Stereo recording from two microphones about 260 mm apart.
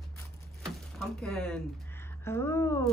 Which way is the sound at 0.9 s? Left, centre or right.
Centre.